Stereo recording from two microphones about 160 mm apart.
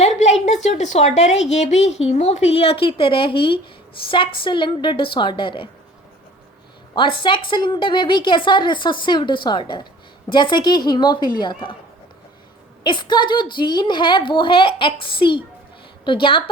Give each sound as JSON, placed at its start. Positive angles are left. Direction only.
{"t": 0.0, "sound": "a sound", "side_deg": 45}
{"t": 0.4, "sound": "a woman's voice", "side_deg": 45}
{"t": 6.9, "sound": "a woman's voice", "side_deg": 30}
{"t": 12.8, "sound": "a woman's voice", "side_deg": 30}